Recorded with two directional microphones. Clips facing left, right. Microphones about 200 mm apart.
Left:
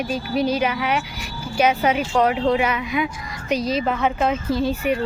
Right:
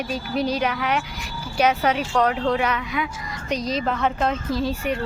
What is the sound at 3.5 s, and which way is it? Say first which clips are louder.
Speech: left 3 dB; 5° left (ahead or behind).